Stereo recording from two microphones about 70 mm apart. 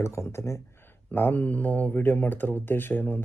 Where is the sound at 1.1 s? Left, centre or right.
Left.